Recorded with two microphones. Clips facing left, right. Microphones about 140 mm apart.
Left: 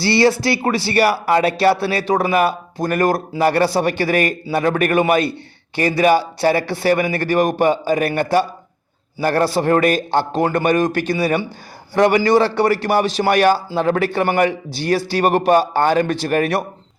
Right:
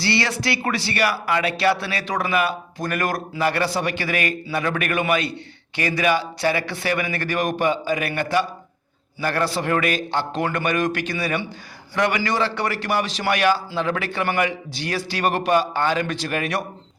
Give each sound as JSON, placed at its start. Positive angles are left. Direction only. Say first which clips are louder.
{"t": 0.0, "sound": "speech", "louder": "left 8 dB", "side_deg": 30}